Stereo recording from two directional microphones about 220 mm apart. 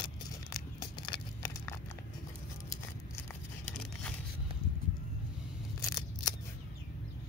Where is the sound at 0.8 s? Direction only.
20° left (ahead or behind).